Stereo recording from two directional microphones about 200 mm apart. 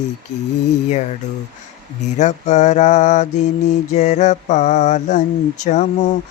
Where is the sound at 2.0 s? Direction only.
35° left (ahead or behind).